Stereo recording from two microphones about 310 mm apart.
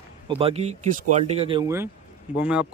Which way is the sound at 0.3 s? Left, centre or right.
Centre.